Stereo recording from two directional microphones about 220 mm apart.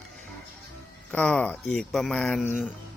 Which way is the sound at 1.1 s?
5° left (ahead or behind).